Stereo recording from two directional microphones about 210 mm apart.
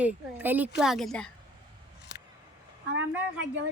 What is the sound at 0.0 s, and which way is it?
A woman's voice, 5° right (ahead or behind).